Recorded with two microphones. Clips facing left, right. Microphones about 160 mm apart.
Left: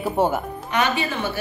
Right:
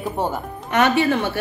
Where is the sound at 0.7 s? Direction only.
65° right (ahead or behind).